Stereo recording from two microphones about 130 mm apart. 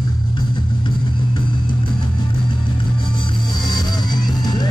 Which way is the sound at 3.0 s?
40° left (ahead or behind).